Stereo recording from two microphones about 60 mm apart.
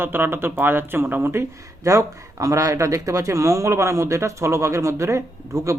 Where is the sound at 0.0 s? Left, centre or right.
Right.